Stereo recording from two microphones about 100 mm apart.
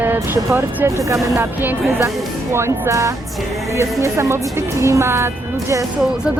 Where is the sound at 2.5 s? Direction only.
30° right (ahead or behind).